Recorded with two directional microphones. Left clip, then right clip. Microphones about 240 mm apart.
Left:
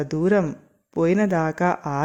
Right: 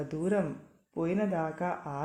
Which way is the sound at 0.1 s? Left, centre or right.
Left.